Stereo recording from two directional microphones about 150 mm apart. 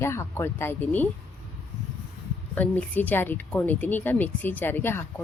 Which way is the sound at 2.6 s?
10° left (ahead or behind).